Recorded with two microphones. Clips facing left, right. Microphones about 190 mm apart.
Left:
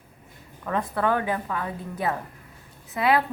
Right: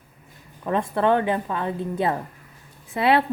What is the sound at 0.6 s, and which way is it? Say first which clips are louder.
A woman's voice: right 4 dB; 25° right (ahead or behind).